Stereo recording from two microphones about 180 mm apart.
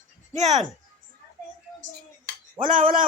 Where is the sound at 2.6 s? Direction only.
50° right (ahead or behind).